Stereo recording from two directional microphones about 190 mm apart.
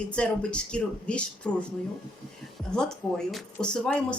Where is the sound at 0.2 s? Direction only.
5° left (ahead or behind).